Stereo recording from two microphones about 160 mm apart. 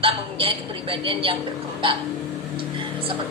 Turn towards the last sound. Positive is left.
turn(degrees=-35)  # may be behind; listen again after turning